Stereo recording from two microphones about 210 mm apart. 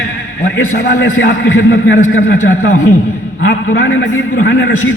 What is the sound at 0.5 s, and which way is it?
Speech, 75° left (ahead or behind).